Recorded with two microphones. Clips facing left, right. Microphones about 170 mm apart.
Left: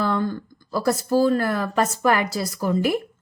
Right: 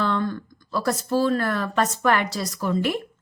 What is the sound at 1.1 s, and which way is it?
A woman's voice, 10° left (ahead or behind).